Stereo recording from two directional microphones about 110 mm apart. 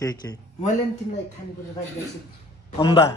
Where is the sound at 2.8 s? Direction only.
50° left (ahead or behind).